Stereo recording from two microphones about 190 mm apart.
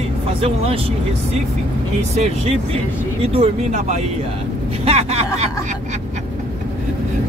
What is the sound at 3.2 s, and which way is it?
Speech, 30° right (ahead or behind).